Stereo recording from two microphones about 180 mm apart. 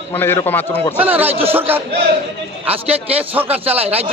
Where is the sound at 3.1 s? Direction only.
10° right (ahead or behind).